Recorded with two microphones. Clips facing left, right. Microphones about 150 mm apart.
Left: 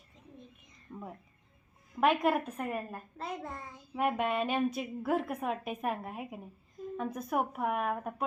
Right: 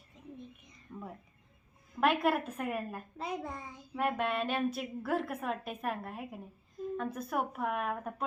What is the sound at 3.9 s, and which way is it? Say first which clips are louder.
Speech: left 2 dB; 5° left (ahead or behind).